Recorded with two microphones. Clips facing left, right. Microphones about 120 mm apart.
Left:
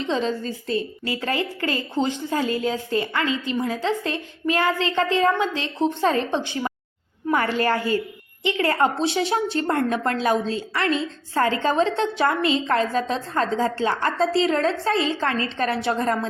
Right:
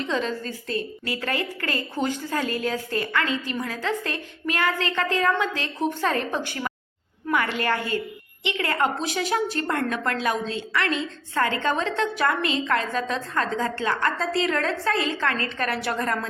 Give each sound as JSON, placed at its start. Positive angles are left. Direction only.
{"t": 0.0, "sound": "a woman's voice", "side_deg": 30}
{"t": 7.3, "sound": "a woman's voice", "side_deg": 35}